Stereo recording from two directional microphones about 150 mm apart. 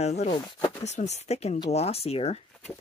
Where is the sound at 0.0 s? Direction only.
45° left (ahead or behind).